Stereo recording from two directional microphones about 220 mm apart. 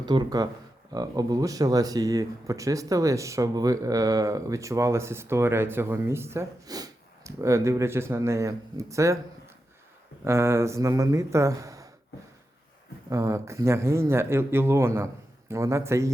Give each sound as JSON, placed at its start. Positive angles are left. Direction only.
{"t": 0.0, "sound": "speech", "side_deg": -20}
{"t": 10.2, "sound": "speech", "side_deg": -10}
{"t": 13.1, "sound": "speech", "side_deg": -15}